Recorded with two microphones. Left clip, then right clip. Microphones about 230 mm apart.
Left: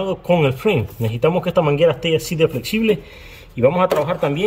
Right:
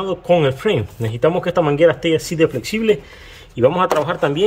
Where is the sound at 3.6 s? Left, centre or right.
Right.